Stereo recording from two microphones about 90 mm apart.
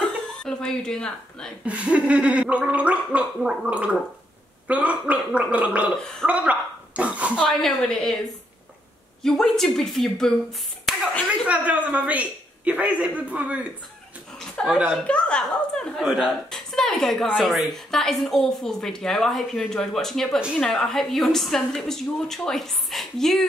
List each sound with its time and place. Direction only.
0.0 s speech: 10° left (ahead or behind)
1.7 s speech: 15° right (ahead or behind)
7.3 s speech: 5° left (ahead or behind)
9.2 s speech: 5° left (ahead or behind)
11.4 s speech: 15° right (ahead or behind)
14.4 s a woman's voice: 5° left (ahead or behind)
16.0 s speech: 5° right (ahead or behind)